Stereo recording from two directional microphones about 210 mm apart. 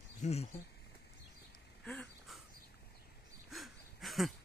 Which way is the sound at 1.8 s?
5° left (ahead or behind).